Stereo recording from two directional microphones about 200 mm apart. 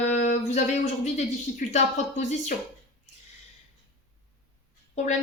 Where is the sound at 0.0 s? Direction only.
35° left (ahead or behind).